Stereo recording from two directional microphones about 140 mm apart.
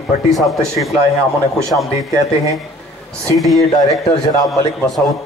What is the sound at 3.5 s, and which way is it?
Speech, 25° left (ahead or behind).